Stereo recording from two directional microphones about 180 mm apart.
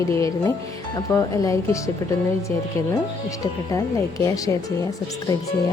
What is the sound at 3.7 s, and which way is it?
Speech, 15° left (ahead or behind).